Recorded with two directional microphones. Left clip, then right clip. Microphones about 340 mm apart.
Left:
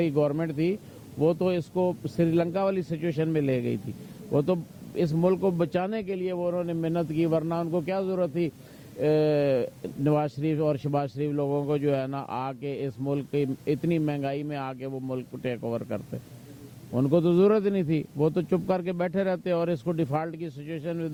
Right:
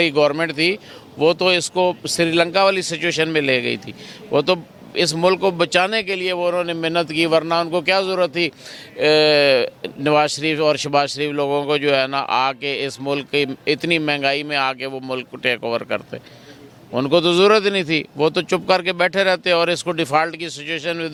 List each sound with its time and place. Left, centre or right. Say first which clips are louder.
0.0 s a man's voice: right 9 dB; centre